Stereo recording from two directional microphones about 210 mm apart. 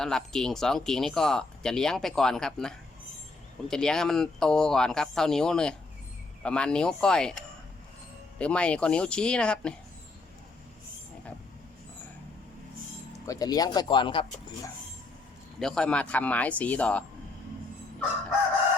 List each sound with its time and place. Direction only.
0.0 s speech: 5° left (ahead or behind)
8.4 s speech: 5° left (ahead or behind)
13.2 s speech: 15° left (ahead or behind)
15.5 s speech: centre (ahead or behind)